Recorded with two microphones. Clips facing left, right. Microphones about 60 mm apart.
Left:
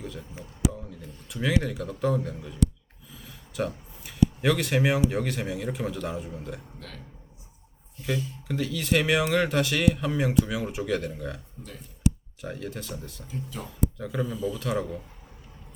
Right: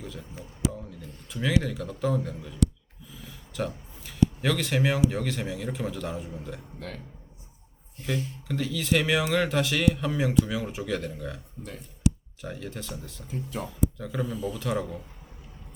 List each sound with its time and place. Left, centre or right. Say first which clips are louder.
0.0 s speech: left 1 dB; centre
3.2 s a sound: left 2 dB; centre
4.4 s speech: left 2 dB; centre
6.7 s speech: right 5 dB; right
8.4 s speech: even; centre
12.4 s speech: left 2 dB; centre
13.2 s speech: right 5 dB; right
14.0 s speech: left 1 dB; centre
14.3 s speech: left 2 dB; right
14.6 s speech: left 1 dB; centre